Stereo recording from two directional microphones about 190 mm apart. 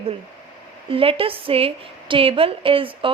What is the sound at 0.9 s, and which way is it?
A woman's voice, 30° right (ahead or behind).